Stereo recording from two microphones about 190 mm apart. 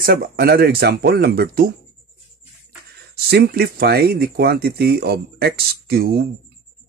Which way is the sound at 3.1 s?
55° right (ahead or behind).